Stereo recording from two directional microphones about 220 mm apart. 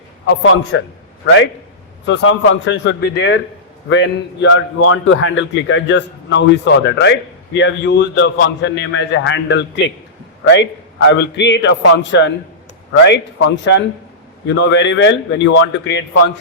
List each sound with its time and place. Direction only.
0.3 s a man's voice: 55° left (ahead or behind)